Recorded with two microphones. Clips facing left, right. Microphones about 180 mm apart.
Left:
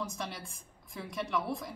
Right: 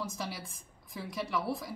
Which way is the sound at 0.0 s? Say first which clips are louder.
Even; 5° right (ahead or behind).